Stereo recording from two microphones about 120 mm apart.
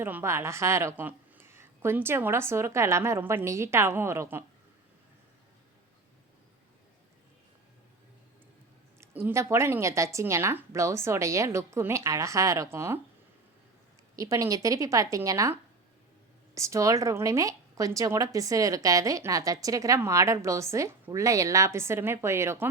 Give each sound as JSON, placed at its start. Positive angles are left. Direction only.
{"t": 0.0, "sound": "a woman's voice", "side_deg": -20}
{"t": 9.0, "sound": "a woman's voice", "side_deg": -20}
{"t": 14.2, "sound": "a woman's voice", "side_deg": -25}
{"t": 16.6, "sound": "a woman's voice", "side_deg": -25}